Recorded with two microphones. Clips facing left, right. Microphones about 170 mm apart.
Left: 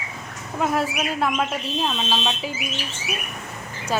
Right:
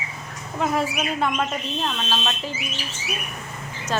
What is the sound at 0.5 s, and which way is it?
Speech, centre (ahead or behind).